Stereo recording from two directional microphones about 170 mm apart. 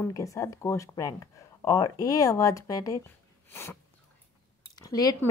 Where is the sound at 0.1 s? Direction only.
20° left (ahead or behind).